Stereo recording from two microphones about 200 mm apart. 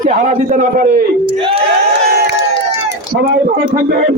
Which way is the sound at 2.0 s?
50° right (ahead or behind).